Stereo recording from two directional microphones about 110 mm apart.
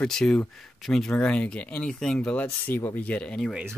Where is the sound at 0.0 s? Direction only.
5° left (ahead or behind).